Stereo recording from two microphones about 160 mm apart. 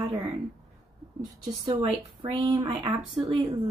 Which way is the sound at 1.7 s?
30° right (ahead or behind).